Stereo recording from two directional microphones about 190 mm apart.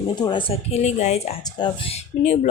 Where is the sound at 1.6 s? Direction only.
25° left (ahead or behind).